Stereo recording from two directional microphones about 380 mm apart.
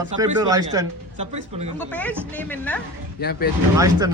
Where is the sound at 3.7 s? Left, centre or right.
Centre.